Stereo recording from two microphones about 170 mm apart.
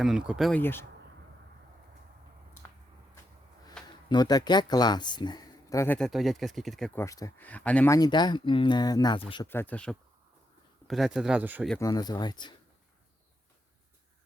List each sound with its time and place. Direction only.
0.0 s speech: 5° right (ahead or behind)
0.6 s speech: 15° left (ahead or behind)
3.8 s a sound: 5° left (ahead or behind)
4.1 s speech: 25° left (ahead or behind)
6.0 s speech: centre (ahead or behind)
7.0 s speech: 20° left (ahead or behind)
7.9 s speech: 25° left (ahead or behind)
9.5 s speech: 10° left (ahead or behind); by 11.7 s 10° right (ahead or behind)
11.8 s speech: 20° left (ahead or behind)